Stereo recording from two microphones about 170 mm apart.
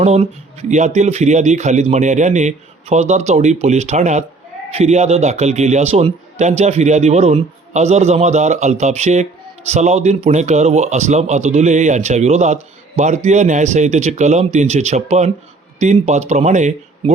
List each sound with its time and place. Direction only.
0.0 s a man's voice: 40° right (ahead or behind)